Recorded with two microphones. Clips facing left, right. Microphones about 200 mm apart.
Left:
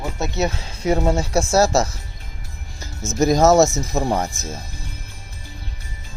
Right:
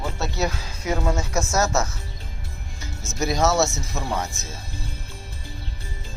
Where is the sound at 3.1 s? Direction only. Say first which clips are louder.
Left 7 dB; 45° left (ahead or behind).